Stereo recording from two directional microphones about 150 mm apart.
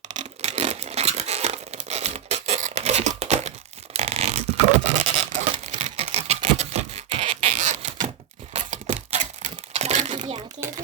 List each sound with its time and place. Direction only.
0.2 s tearing: 45° right (ahead or behind)
3.9 s scratch: 45° right (ahead or behind)
8.5 s a sound: 50° right (ahead or behind)